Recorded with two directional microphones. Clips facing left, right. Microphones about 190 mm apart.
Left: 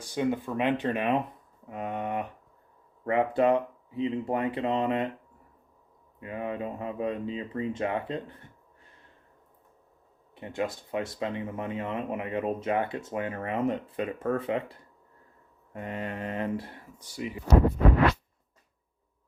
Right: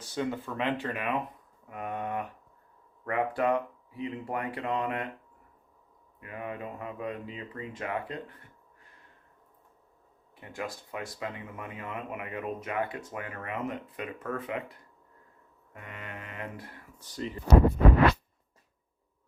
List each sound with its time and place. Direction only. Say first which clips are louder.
0.0 s speech: left 4 dB; 15° left (ahead or behind)
6.1 s speech: left 5 dB; 25° left (ahead or behind)
10.3 s speech: left 6 dB; 25° left (ahead or behind)
15.7 s mantra: left 9 dB; 30° left (ahead or behind)
17.0 s speech: left 1 dB; 10° left (ahead or behind)